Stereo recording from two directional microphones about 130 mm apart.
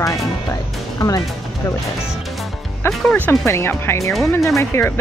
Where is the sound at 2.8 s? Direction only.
20° left (ahead or behind).